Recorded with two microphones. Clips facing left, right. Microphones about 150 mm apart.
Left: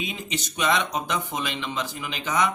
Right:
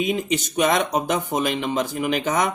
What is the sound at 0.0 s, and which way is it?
Speech, 50° right (ahead or behind).